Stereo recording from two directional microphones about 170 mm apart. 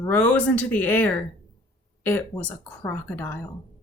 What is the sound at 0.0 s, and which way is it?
Speech, 10° left (ahead or behind).